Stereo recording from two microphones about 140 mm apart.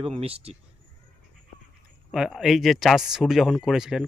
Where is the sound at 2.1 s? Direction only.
Centre (ahead or behind).